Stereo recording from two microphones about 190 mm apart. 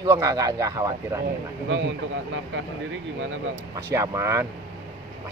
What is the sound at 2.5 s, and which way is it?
Speech, 75° right (ahead or behind).